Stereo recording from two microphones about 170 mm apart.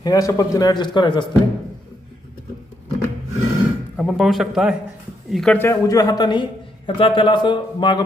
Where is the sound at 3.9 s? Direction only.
Centre (ahead or behind).